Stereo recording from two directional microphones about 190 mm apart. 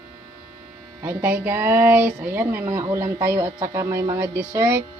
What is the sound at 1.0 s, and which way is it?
Speech, 10° right (ahead or behind).